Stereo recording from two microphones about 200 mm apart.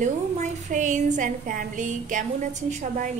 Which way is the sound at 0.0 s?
40° right (ahead or behind).